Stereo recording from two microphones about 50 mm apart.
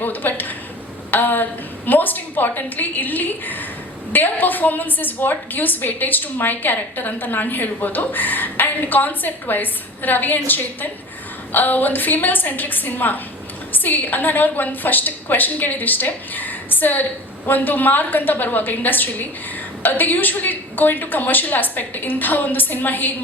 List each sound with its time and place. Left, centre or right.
0.0 s a woman's voice: left